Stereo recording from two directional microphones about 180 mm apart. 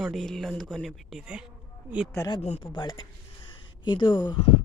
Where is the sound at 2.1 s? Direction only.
20° left (ahead or behind).